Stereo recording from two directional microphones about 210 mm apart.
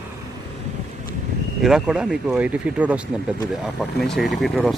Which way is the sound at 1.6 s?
5° right (ahead or behind).